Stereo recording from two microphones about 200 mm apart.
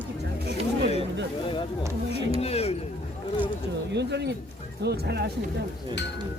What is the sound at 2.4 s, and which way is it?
Speech, 30° left (ahead or behind).